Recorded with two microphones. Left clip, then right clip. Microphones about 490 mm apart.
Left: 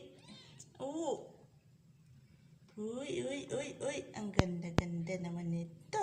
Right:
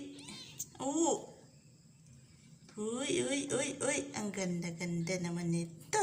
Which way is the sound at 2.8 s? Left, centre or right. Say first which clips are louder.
Right 5 dB; left.